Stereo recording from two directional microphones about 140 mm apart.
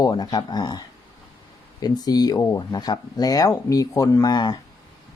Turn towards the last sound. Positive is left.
turn(degrees=30)  # may be behind; listen again after turning